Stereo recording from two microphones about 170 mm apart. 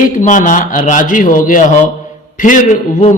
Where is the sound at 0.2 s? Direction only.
45° left (ahead or behind).